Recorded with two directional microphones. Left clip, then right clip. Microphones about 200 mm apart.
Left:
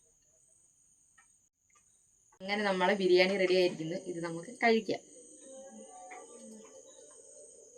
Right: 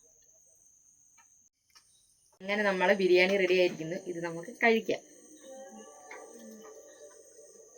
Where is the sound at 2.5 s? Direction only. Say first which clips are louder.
Right 3 dB; 20° left (ahead or behind).